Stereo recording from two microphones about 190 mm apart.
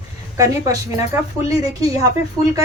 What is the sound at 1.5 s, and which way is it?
Speech, 20° right (ahead or behind).